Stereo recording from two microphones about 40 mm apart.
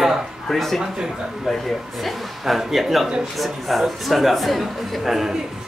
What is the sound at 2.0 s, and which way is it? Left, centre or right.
A man's voice, centre.